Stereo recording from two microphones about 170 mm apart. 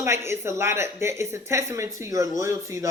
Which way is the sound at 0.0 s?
15° right (ahead or behind).